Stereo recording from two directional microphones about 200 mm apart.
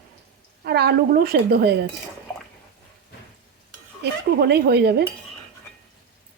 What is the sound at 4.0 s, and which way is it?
A woman's voice, 55° right (ahead or behind).